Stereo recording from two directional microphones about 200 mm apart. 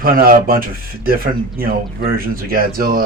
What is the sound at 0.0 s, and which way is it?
Speech, 45° right (ahead or behind).